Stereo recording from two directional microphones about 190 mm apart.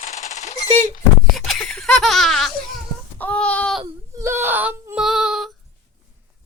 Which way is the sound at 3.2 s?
5° left (ahead or behind).